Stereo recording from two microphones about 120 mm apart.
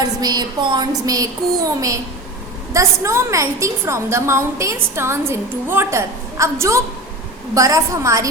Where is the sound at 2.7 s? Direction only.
25° right (ahead or behind).